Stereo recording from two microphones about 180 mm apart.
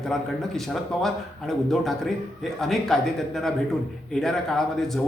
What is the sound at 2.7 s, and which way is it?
Speech, centre (ahead or behind).